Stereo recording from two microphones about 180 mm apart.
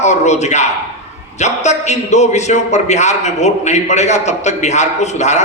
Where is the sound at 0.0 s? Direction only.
40° left (ahead or behind).